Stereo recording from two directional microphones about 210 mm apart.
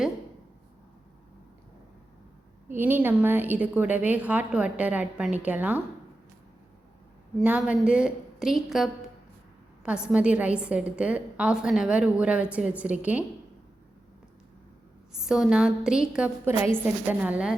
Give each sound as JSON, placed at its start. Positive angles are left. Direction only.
{"t": 2.6, "sound": "a woman's voice", "side_deg": -10}
{"t": 7.3, "sound": "a woman's voice", "side_deg": -5}
{"t": 15.1, "sound": "a woman's voice", "side_deg": -5}